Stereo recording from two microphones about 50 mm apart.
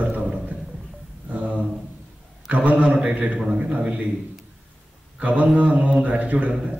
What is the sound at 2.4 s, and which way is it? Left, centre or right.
A man's voice, right.